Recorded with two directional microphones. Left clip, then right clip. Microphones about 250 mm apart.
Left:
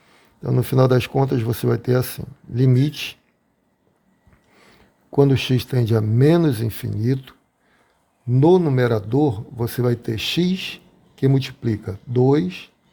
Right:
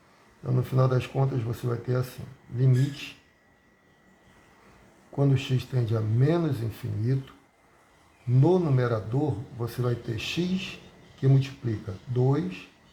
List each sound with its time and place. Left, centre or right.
0.4 s speech: left
5.1 s speech: left
8.4 s speech: left